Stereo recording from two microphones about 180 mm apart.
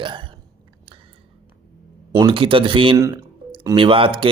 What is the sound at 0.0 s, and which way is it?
Chewing, 25° right (ahead or behind).